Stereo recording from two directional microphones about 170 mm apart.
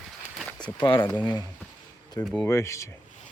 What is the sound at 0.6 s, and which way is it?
Speech, 30° left (ahead or behind).